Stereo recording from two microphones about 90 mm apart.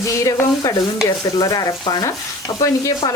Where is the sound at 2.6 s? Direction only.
40° left (ahead or behind).